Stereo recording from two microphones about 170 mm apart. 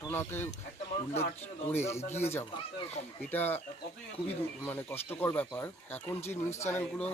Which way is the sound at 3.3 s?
10° left (ahead or behind).